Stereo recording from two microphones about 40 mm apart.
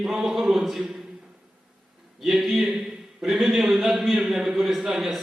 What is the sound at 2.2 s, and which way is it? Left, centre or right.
A man's voice, centre.